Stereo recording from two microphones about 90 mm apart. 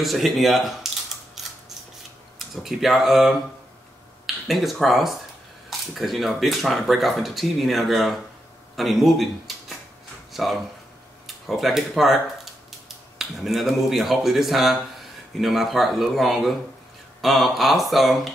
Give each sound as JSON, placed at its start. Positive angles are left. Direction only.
{"t": 0.0, "sound": "camera", "side_deg": 0}
{"t": 2.3, "sound": "speech", "side_deg": 0}
{"t": 4.5, "sound": "speech", "side_deg": 0}